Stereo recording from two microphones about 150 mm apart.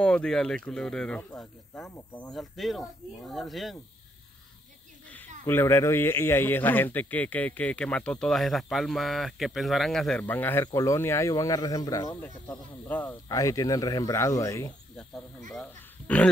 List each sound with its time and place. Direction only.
0.0 s speech: 5° left (ahead or behind)
5.5 s a man's voice: 15° left (ahead or behind)
10.2 s speech: 15° left (ahead or behind)
12.8 s a man's voice: 10° left (ahead or behind)
13.3 s speech: 20° left (ahead or behind)
15.5 s pig: 5° left (ahead or behind)